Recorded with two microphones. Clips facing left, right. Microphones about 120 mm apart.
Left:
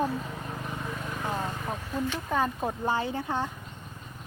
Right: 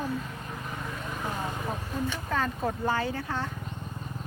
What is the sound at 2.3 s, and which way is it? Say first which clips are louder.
Speech: left 1 dB; 15° left (ahead or behind).